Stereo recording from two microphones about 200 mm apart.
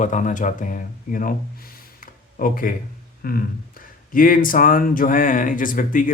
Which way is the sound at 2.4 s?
45° left (ahead or behind).